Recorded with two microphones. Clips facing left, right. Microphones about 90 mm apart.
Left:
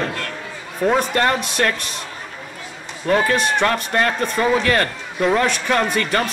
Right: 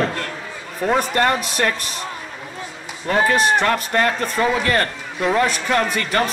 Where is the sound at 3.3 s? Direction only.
Centre (ahead or behind).